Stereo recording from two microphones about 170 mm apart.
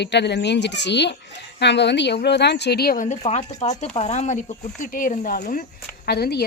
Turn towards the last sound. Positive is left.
turn(degrees=70)  # may be behind; listen again after turning